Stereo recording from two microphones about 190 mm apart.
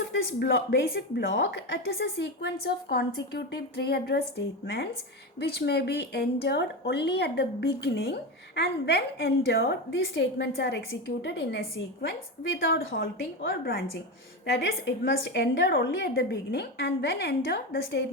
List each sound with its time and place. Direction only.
0.1 s a woman's voice: 75° left (ahead or behind); by 10.0 s 55° left (ahead or behind)
10.0 s a woman's voice: 70° left (ahead or behind)